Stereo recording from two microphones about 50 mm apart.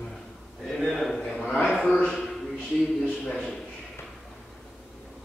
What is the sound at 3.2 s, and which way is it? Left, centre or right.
Speech, centre.